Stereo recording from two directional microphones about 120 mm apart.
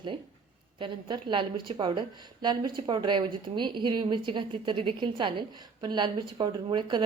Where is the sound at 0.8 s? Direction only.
40° right (ahead or behind).